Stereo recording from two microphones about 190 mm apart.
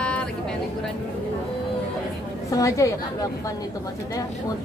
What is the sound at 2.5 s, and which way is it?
Speech, 15° left (ahead or behind).